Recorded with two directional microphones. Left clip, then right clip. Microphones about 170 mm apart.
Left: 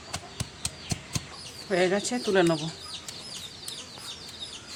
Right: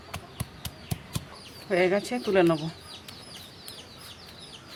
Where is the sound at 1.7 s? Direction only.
20° right (ahead or behind).